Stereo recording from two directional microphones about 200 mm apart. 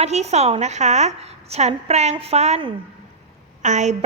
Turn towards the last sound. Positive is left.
turn(degrees=-35)  # may be behind; listen again after turning